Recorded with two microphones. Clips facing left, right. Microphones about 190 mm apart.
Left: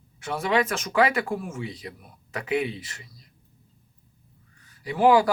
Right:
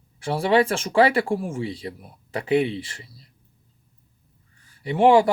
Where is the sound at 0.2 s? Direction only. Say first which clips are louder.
Right 5 dB; 30° right (ahead or behind).